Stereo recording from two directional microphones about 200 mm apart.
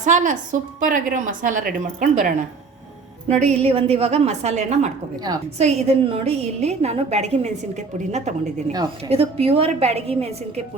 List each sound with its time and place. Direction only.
0.0 s a woman's voice: 40° right (ahead or behind)